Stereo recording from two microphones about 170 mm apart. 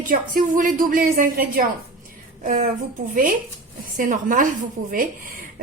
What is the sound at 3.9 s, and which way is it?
A woman's voice, 50° right (ahead or behind).